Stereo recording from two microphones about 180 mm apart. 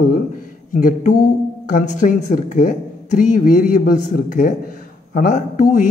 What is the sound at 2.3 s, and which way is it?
A man's voice, 45° left (ahead or behind).